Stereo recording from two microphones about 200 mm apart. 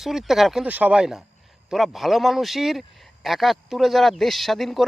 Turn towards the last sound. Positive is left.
turn(degrees=0)  # may be behind; listen again after turning